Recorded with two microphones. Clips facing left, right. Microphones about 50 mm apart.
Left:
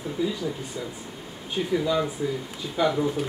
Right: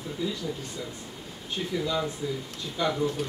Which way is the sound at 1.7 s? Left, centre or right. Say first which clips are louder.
Left 4 dB; centre.